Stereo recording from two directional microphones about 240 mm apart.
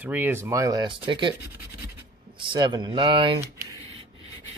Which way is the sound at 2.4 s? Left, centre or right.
Centre.